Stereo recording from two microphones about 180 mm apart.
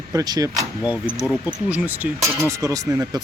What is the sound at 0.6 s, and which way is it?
Speech, 5° right (ahead or behind).